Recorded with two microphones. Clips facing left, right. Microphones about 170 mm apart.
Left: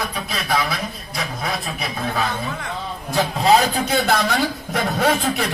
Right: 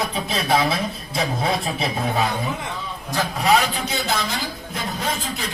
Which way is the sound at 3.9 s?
55° left (ahead or behind).